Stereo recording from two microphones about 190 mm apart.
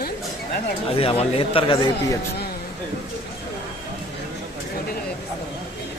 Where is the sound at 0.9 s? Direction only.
30° left (ahead or behind).